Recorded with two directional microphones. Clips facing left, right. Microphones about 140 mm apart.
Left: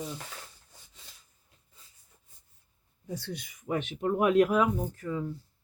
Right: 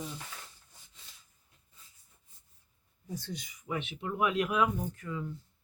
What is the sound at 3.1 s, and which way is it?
Speech, 70° left (ahead or behind).